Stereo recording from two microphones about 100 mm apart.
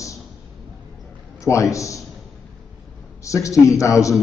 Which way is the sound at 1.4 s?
30° left (ahead or behind).